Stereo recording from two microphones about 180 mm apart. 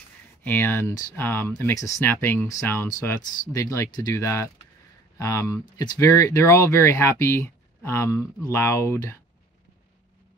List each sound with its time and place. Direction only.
0.4 s speech: 10° left (ahead or behind)